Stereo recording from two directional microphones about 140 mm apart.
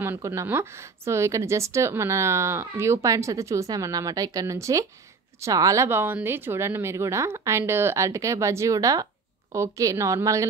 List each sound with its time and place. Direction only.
0.0 s speech: 20° right (ahead or behind)